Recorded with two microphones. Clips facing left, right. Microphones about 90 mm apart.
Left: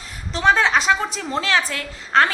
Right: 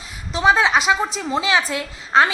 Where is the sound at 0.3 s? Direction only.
10° right (ahead or behind).